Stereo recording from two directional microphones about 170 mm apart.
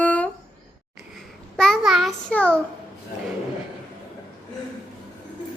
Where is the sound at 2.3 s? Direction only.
10° left (ahead or behind).